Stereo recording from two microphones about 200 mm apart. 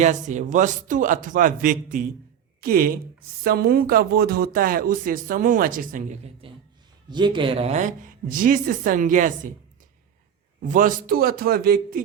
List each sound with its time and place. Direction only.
0.0 s a man's voice: 35° right (ahead or behind)
7.1 s a man's voice: 25° right (ahead or behind); by 9.3 s 40° right (ahead or behind)
10.6 s speech: 40° right (ahead or behind)